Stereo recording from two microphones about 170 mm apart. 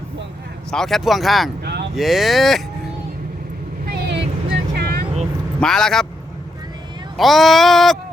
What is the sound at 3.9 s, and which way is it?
Vehicle, 75° right (ahead or behind).